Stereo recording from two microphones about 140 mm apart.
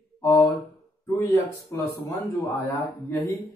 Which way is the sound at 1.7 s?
20° left (ahead or behind).